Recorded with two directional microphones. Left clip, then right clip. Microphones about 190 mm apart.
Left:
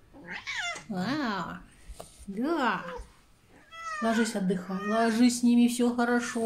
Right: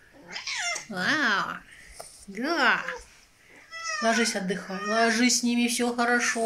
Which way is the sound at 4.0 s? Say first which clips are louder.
Right 4 dB; 5° left (ahead or behind).